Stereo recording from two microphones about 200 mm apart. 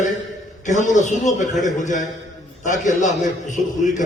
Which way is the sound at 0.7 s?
40° left (ahead or behind).